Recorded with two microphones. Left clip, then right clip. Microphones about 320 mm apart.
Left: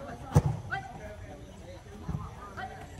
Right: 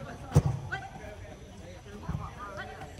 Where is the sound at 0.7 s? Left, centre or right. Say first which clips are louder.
Left 2 dB; centre.